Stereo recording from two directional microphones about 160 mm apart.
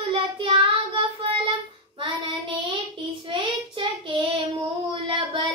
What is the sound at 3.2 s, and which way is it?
Child singing, 30° right (ahead or behind).